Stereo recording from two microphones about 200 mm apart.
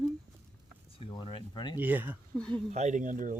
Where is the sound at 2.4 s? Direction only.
5° left (ahead or behind).